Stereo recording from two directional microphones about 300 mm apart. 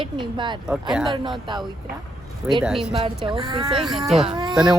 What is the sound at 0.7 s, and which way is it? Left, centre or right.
Speech, centre.